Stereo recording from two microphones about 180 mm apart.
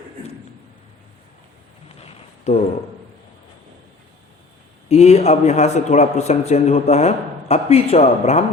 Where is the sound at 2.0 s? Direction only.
35° left (ahead or behind).